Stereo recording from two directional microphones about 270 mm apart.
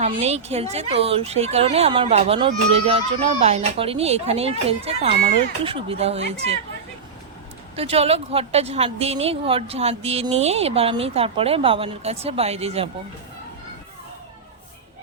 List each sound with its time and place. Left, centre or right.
0.0 s a woman's voice: right
7.8 s a woman's voice: right